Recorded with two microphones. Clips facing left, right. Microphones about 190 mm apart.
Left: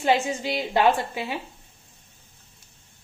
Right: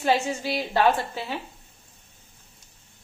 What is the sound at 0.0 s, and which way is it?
A woman's voice, 15° left (ahead or behind).